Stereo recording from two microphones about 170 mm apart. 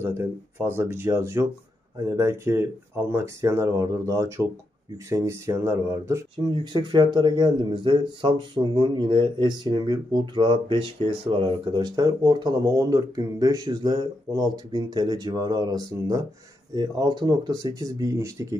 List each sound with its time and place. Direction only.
0.0 s speech: 15° right (ahead or behind)
6.3 s speech: 25° right (ahead or behind)